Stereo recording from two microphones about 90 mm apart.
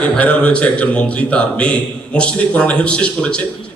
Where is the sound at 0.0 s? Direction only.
15° left (ahead or behind).